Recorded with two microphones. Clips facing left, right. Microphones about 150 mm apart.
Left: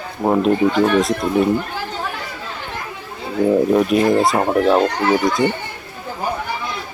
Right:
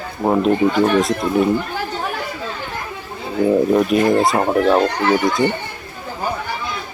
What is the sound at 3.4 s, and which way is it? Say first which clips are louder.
Speech: even; centre (ahead or behind).